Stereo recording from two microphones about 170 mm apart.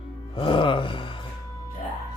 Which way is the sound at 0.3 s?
30° left (ahead or behind).